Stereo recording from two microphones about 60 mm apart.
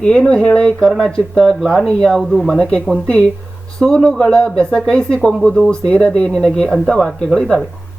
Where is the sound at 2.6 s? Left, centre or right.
Centre.